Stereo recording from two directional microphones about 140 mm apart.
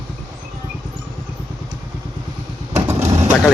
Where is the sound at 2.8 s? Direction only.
20° right (ahead or behind).